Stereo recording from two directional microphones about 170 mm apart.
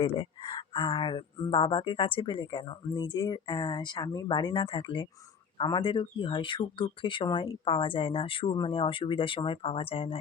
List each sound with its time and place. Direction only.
0.2 s speech: 30° left (ahead or behind)